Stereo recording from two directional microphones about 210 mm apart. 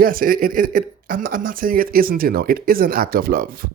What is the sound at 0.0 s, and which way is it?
A man's voice, 45° right (ahead or behind).